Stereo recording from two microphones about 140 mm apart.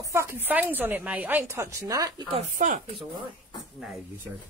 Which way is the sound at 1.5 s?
20° right (ahead or behind).